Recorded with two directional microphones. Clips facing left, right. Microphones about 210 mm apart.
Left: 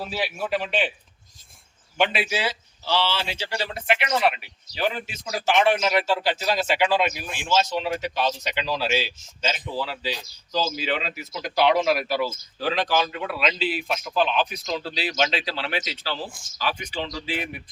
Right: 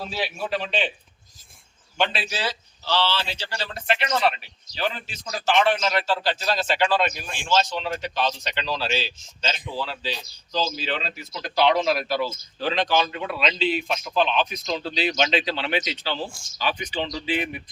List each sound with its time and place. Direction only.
0.0 s speech: 10° left (ahead or behind)
2.0 s speech: 15° left (ahead or behind)
17.0 s speech: 20° right (ahead or behind)